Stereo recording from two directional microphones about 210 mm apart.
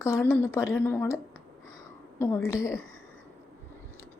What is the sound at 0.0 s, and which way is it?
A woman's voice, 10° left (ahead or behind).